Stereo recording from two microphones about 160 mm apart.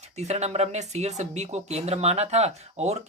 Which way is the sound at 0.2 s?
45° right (ahead or behind).